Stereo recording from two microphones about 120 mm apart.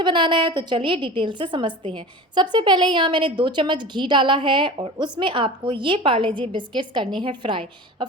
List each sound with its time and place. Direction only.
0.0 s a woman's voice: 40° right (ahead or behind)